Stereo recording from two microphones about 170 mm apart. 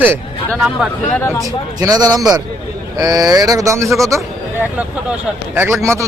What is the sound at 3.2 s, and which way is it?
Speech, 20° right (ahead or behind).